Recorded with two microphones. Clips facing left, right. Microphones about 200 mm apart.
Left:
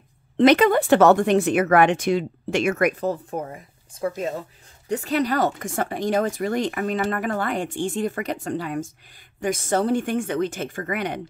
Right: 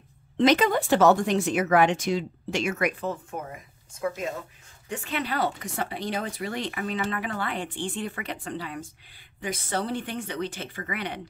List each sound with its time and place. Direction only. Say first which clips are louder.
0.4 s speech: left 5 dB; 60° left (ahead or behind)